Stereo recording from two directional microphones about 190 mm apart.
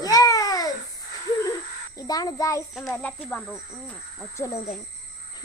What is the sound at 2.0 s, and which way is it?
Speech, 20° left (ahead or behind).